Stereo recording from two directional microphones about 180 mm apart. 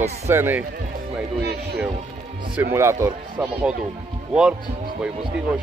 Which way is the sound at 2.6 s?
15° right (ahead or behind).